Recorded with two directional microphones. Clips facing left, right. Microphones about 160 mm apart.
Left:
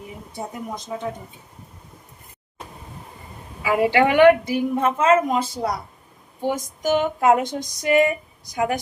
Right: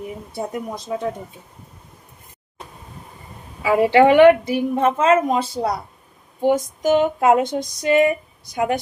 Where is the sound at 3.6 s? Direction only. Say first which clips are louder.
Right 5 dB; 25° right (ahead or behind).